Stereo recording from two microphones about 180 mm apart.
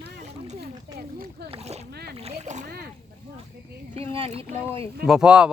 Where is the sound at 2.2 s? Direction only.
35° right (ahead or behind).